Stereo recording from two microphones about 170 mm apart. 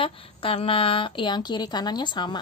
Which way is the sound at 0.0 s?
35° left (ahead or behind).